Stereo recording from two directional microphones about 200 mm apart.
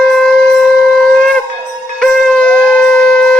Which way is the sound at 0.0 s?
5° left (ahead or behind).